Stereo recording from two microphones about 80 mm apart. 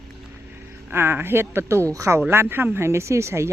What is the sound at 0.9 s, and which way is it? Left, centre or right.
Speech, right.